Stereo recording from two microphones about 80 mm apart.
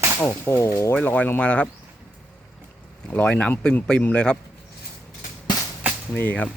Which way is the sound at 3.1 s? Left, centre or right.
Centre.